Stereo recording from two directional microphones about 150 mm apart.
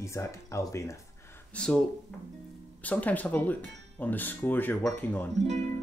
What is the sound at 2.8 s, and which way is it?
Speech, 10° left (ahead or behind).